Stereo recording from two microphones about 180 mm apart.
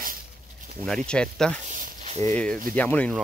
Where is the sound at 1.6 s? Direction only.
45° right (ahead or behind).